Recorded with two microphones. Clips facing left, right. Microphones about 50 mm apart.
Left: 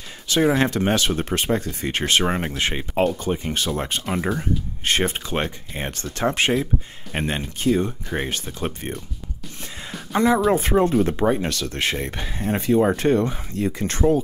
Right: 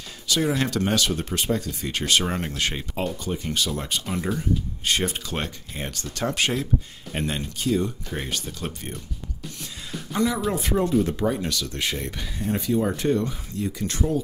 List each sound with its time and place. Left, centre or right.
0.3 s speech: left
3.0 s speech: left
10.1 s speech: left